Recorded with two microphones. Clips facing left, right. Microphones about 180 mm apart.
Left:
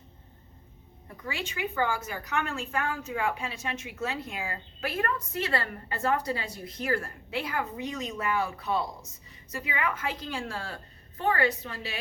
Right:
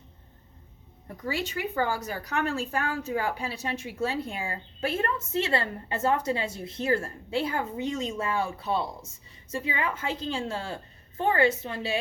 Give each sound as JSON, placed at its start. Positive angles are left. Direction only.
{"t": 1.3, "sound": "a woman's voice", "side_deg": -40}